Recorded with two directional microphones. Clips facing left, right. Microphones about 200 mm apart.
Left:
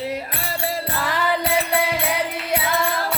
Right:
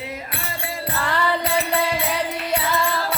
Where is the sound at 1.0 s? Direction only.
10° left (ahead or behind).